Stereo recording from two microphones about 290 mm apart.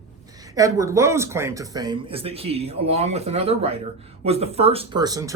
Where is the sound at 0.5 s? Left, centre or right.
Centre.